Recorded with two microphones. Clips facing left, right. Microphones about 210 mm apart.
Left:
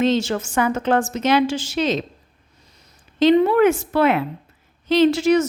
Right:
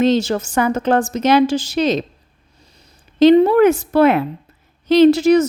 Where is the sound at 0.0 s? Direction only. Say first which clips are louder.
Right 4 dB; 40° right (ahead or behind).